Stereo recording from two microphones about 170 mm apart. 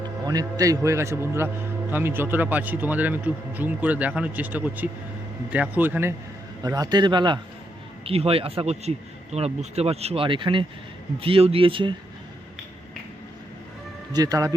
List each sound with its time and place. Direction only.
0.3 s a man's voice: 20° right (ahead or behind)
14.1 s a man's voice: 20° right (ahead or behind)